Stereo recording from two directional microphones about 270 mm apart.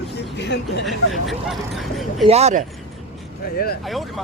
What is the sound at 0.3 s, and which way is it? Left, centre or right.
Speech, left.